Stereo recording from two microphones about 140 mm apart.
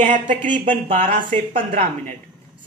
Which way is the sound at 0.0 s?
65° right (ahead or behind).